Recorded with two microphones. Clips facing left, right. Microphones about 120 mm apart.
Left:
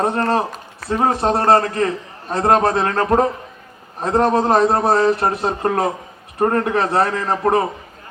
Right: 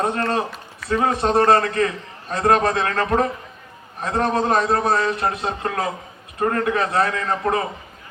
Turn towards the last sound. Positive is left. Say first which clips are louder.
# left 4 dB
turn(degrees=30)  # may be behind; listen again after turning